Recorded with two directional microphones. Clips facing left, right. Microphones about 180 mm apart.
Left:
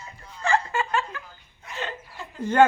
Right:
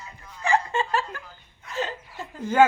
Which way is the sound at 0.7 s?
35° right (ahead or behind).